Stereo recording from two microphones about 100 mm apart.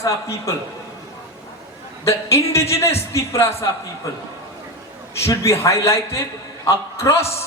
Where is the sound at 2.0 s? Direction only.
30° left (ahead or behind).